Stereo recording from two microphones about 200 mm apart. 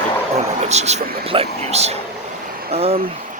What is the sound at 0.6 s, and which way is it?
Speech, 35° right (ahead or behind).